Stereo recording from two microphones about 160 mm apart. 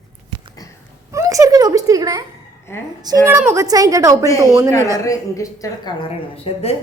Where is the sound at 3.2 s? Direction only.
15° right (ahead or behind).